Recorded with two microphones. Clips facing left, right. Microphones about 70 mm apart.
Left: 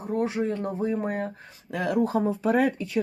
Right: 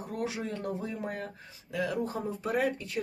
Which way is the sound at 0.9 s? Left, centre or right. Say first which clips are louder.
Left 8 dB; left.